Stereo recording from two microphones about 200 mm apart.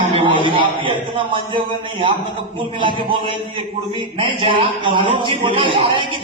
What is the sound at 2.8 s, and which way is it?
A man's voice, 25° right (ahead or behind).